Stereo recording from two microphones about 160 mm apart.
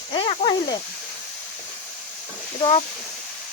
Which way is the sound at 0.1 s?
30° left (ahead or behind).